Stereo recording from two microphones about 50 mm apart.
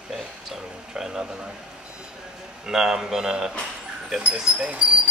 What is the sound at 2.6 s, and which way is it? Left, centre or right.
Speech, centre.